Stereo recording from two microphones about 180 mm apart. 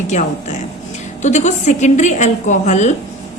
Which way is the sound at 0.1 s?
40° left (ahead or behind).